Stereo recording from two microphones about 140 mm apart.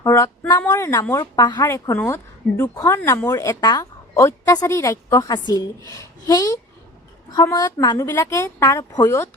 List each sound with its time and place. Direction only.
0.0 s speech: 20° left (ahead or behind)
1.6 s speech: 20° left (ahead or behind)